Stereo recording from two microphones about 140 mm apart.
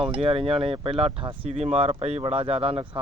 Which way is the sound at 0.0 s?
40° right (ahead or behind).